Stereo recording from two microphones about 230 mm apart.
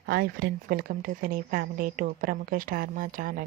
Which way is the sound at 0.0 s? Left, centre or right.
Right.